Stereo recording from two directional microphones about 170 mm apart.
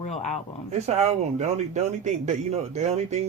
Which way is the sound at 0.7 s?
40° right (ahead or behind).